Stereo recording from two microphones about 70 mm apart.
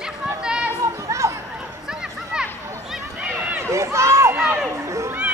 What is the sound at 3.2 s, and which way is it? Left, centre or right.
Run, right.